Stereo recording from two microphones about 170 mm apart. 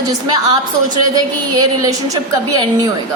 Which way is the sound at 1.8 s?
20° right (ahead or behind).